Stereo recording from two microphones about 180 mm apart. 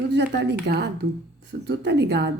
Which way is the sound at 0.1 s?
70° right (ahead or behind).